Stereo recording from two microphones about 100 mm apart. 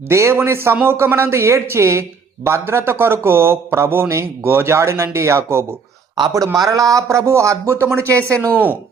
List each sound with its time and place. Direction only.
0.1 s speech: 30° right (ahead or behind)